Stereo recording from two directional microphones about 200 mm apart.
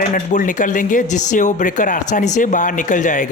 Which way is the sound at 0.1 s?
40° left (ahead or behind).